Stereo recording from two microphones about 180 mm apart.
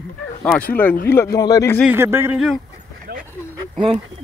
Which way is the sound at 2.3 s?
Centre (ahead or behind).